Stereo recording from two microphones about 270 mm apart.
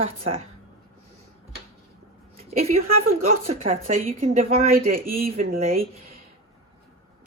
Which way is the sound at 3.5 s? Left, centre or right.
Right.